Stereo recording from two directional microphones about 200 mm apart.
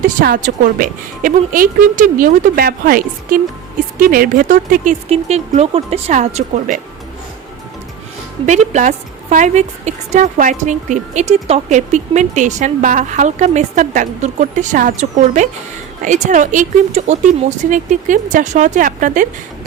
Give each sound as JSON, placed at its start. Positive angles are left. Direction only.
{"t": 0.0, "sound": "a woman's voice", "side_deg": -45}
{"t": 8.4, "sound": "a woman's voice", "side_deg": -35}